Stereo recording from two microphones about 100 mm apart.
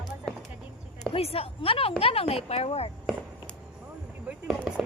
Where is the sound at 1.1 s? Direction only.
75° left (ahead or behind).